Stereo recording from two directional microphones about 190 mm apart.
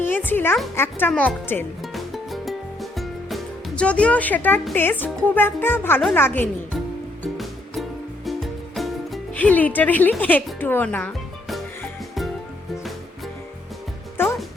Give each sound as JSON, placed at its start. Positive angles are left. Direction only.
{"t": 0.0, "sound": "music", "side_deg": 10}
{"t": 0.8, "sound": "speech", "side_deg": 10}
{"t": 1.8, "sound": "music", "side_deg": 0}
{"t": 4.6, "sound": "speech", "side_deg": 10}
{"t": 7.3, "sound": "music", "side_deg": 0}